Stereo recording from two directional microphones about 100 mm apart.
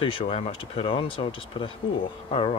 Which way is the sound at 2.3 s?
85° left.